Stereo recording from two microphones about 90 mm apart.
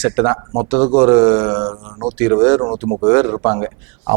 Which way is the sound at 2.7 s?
35° right (ahead or behind).